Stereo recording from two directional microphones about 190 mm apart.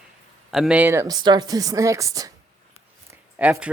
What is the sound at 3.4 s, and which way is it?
Speech, 5° right (ahead or behind).